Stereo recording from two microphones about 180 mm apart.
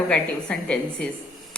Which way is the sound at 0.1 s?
5° left (ahead or behind).